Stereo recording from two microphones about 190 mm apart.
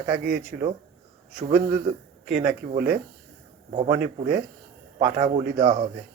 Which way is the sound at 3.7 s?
30° right (ahead or behind).